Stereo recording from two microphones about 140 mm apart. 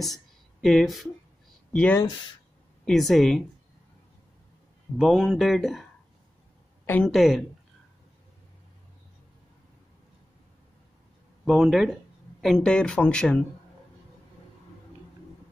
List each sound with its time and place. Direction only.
0.6 s speech: centre (ahead or behind)
2.0 s speech: 30° left (ahead or behind)
2.8 s speech: centre (ahead or behind)
4.9 s speech: centre (ahead or behind)
7.1 s speech: centre (ahead or behind)
11.4 s speech: centre (ahead or behind)